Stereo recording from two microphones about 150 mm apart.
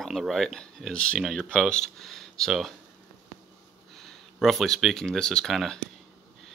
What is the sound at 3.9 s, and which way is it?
Speech, centre (ahead or behind).